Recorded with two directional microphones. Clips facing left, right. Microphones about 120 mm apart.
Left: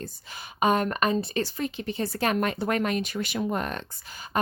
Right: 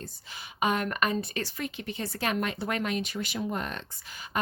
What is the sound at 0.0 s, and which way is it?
Speech, 50° left (ahead or behind).